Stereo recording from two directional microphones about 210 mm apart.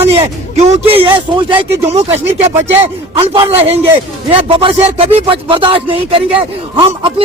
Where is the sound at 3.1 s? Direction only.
25° right (ahead or behind).